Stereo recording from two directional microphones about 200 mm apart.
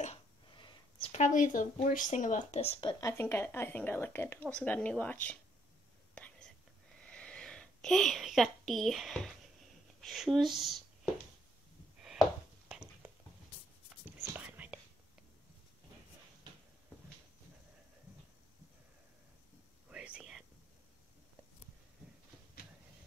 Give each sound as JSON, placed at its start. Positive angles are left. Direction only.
{"t": 0.0, "sound": "speech", "side_deg": 25}
{"t": 6.1, "sound": "whispering", "side_deg": 5}
{"t": 7.1, "sound": "speech", "side_deg": 5}
{"t": 12.6, "sound": "a sound", "side_deg": -5}
{"t": 14.3, "sound": "whispering", "side_deg": -10}
{"t": 19.9, "sound": "whispering", "side_deg": -5}